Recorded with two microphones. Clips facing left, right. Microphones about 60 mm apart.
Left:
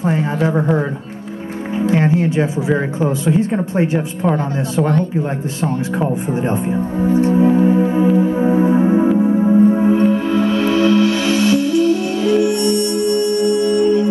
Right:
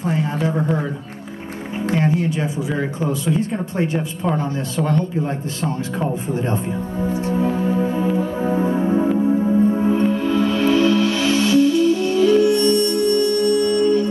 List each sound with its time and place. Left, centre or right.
0.0 s speech: left
2.0 s music: left
2.7 s speech: left
7.1 s music: left
7.3 s music: left